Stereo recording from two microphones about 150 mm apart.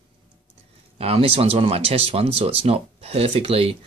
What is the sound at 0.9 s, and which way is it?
Speech, 40° right (ahead or behind).